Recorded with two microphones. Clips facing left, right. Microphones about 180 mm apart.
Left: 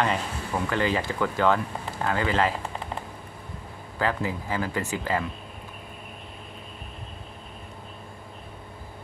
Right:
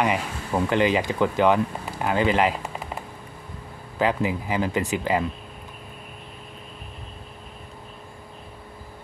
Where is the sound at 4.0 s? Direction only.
15° right (ahead or behind).